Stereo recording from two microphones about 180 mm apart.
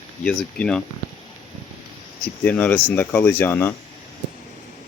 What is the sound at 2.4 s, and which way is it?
Speech, 10° left (ahead or behind).